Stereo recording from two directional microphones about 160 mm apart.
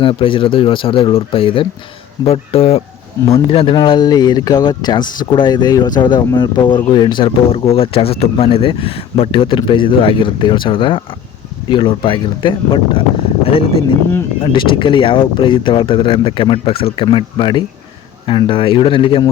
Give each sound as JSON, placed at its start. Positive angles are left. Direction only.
{"t": 0.0, "sound": "speech", "side_deg": 35}